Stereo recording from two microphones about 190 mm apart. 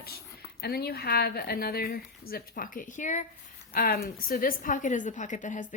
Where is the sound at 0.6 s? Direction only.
55° left (ahead or behind).